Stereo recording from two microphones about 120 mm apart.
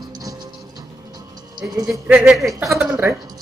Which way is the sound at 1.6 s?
20° right (ahead or behind).